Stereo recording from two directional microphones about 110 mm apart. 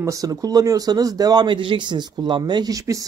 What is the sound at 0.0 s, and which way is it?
Speech, 30° right (ahead or behind).